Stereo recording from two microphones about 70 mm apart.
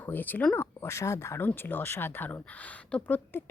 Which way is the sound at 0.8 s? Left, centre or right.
Left.